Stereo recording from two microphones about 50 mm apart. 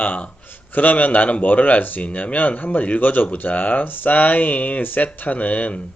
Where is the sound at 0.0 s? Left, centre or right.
Left.